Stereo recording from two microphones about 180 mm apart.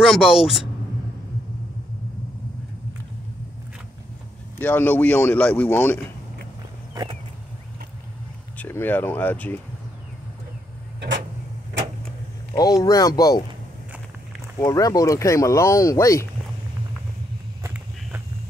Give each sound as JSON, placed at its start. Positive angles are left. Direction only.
{"t": 0.0, "sound": "speech", "side_deg": 0}
{"t": 4.6, "sound": "speech", "side_deg": 10}
{"t": 8.5, "sound": "speech", "side_deg": 10}
{"t": 11.0, "sound": "a sound", "side_deg": -75}
{"t": 12.5, "sound": "speech", "side_deg": 20}
{"t": 14.6, "sound": "speech", "side_deg": 20}